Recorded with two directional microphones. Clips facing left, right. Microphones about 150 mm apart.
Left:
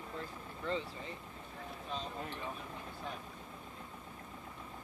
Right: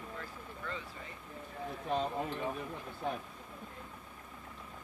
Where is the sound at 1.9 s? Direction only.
60° right (ahead or behind).